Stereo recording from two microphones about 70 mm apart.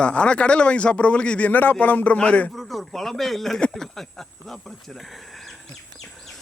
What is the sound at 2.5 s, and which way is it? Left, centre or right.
Speech, centre.